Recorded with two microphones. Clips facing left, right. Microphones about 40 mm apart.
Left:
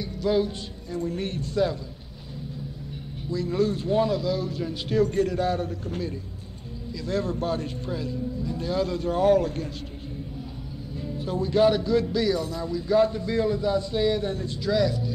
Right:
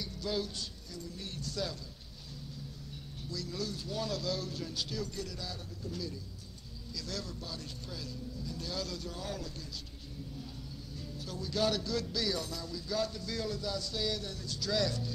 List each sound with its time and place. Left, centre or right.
0.0 s a man's voice: left
3.3 s a man's voice: left
4.1 s speech: centre
4.8 s a man's voice: left
6.9 s a man's voice: left
11.0 s speech: left
14.7 s speech: centre